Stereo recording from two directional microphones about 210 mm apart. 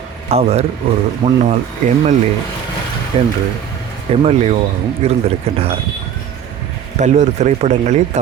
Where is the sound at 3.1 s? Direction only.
25° right (ahead or behind).